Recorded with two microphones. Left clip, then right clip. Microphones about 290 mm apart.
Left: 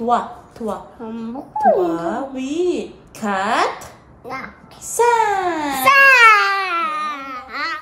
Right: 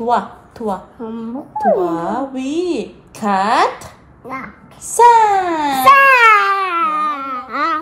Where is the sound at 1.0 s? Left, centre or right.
Centre.